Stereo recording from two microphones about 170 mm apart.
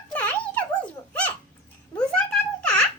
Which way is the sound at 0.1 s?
10° left (ahead or behind).